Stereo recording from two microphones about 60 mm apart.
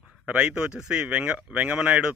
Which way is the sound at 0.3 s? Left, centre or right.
Right.